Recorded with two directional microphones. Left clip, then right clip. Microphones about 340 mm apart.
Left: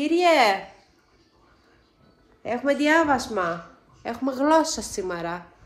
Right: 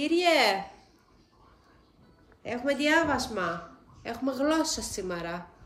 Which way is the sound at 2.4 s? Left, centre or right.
Centre.